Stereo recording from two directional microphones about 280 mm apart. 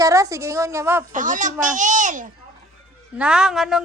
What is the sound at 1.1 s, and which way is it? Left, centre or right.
A child's voice, right.